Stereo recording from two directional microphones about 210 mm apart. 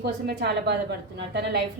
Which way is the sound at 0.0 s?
50° right (ahead or behind).